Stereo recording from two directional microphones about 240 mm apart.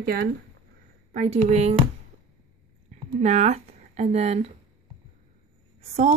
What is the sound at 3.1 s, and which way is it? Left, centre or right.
Speech, right.